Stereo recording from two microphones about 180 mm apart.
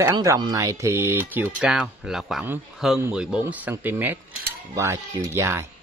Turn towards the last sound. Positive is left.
turn(degrees=-15)  # may be behind; listen again after turning